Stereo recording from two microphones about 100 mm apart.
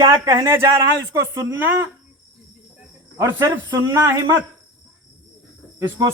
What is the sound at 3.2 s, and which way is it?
Speech, 25° right (ahead or behind).